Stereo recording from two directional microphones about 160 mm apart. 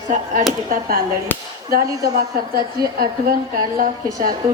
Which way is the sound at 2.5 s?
70° right (ahead or behind).